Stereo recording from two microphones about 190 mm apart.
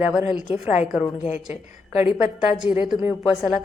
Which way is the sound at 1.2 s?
35° left (ahead or behind).